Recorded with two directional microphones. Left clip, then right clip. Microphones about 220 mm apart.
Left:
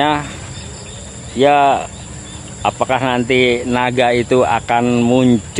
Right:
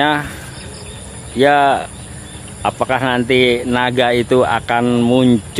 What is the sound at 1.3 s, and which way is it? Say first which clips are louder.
Speech: even; 10° right (ahead or behind).